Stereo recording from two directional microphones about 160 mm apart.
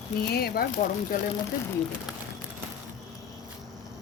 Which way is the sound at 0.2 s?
75° left (ahead or behind).